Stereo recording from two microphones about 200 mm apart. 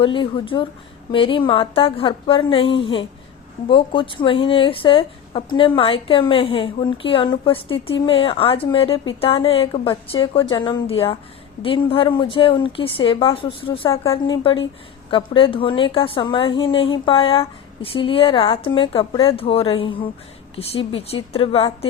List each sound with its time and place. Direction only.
0.0 s a woman's voice: 25° left (ahead or behind)